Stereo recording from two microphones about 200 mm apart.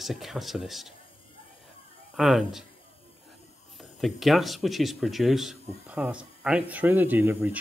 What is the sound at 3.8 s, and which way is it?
Speech, centre (ahead or behind).